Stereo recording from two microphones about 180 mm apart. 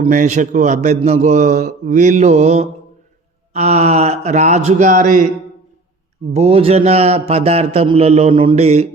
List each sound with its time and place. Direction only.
0.0 s a man's voice: 45° right (ahead or behind)
6.3 s a man's voice: 35° right (ahead or behind)